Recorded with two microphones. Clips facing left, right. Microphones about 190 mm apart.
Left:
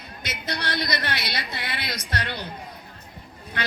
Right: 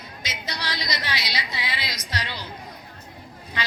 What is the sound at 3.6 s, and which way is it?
Speech, 60° left (ahead or behind).